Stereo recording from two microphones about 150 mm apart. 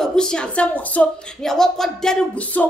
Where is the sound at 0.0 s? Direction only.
5° left (ahead or behind).